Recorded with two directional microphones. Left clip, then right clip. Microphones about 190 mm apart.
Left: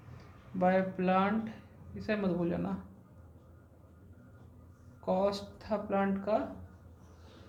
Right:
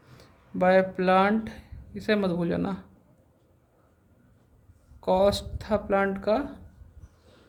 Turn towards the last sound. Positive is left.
turn(degrees=-65)  # may be behind; listen again after turning